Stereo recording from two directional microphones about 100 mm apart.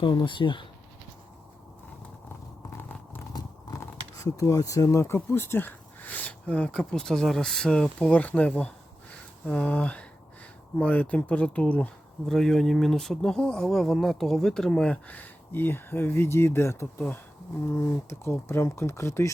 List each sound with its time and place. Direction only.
0.0 s speech: 50° left (ahead or behind)
4.2 s speech: 35° left (ahead or behind); by 14.9 s 5° left (ahead or behind)
15.0 s speech: 15° left (ahead or behind)
17.7 s speech: 25° left (ahead or behind)